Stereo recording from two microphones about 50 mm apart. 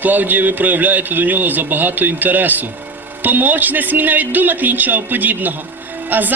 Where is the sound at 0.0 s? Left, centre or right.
Right.